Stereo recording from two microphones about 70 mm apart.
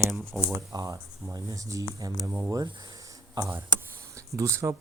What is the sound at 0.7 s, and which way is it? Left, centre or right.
Speech, right.